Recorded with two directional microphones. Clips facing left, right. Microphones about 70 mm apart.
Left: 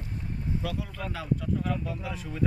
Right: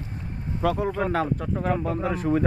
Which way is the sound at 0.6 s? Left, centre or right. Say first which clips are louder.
Right 11 dB; right.